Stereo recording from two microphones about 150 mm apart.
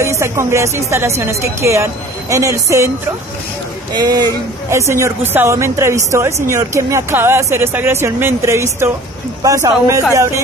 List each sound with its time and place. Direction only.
0.2 s speech: 20° right (ahead or behind)
3.9 s speech: 25° right (ahead or behind)